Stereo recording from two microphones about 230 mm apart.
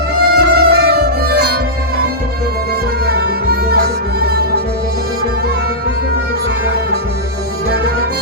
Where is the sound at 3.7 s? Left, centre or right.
Right.